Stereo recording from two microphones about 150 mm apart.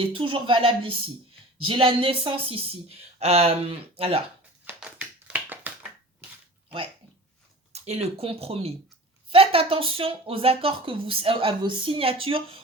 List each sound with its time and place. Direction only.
0.0 s speech: 35° right (ahead or behind)
4.6 s a sound: 10° right (ahead or behind)
7.7 s speech: 45° right (ahead or behind)